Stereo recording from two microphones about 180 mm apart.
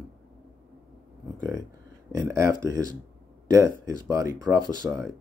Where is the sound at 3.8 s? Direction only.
20° right (ahead or behind).